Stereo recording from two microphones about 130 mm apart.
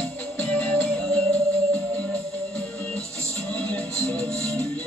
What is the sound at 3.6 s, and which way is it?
Music, 10° left (ahead or behind).